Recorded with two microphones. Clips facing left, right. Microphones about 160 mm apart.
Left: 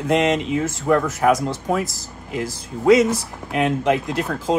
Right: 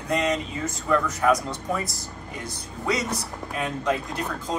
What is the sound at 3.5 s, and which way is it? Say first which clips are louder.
Speech: left 8 dB; 80° left.